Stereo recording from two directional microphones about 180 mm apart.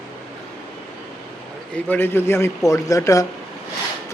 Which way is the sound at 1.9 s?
10° left (ahead or behind).